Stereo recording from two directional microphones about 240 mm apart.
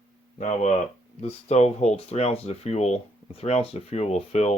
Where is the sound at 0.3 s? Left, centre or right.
Left.